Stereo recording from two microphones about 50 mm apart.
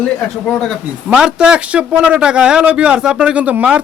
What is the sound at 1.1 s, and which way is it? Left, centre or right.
A man's voice, centre.